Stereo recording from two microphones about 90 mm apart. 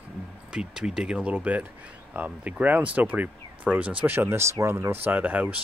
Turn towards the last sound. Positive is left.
turn(degrees=-15)  # may be behind; listen again after turning